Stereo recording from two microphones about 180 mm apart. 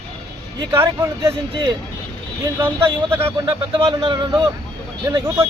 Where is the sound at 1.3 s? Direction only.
30° right (ahead or behind).